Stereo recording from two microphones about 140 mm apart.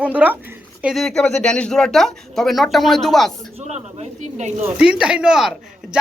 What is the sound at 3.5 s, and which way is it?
Speech, 50° right (ahead or behind).